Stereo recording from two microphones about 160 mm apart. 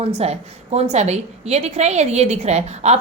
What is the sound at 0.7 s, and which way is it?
A woman's voice, 40° right (ahead or behind).